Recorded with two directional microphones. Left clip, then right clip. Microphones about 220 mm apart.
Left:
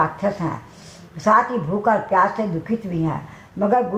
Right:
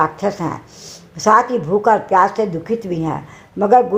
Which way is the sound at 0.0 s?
45° right (ahead or behind).